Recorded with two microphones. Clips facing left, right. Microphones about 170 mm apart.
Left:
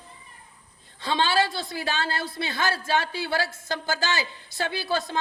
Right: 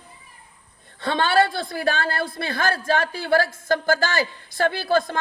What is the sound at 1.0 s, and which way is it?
Speech, 55° right (ahead or behind).